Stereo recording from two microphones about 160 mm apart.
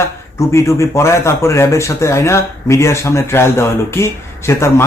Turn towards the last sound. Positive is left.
turn(degrees=15)  # may be behind; listen again after turning